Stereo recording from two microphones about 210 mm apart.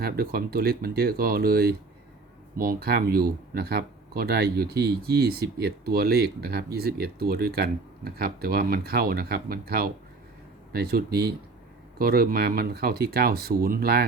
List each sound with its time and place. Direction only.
0.0 s speech: 45° right (ahead or behind)